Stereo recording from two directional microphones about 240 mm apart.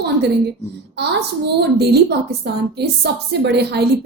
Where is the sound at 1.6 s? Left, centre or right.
Right.